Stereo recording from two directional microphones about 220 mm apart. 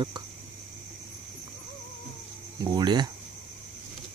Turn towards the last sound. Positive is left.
turn(degrees=-20)  # may be behind; listen again after turning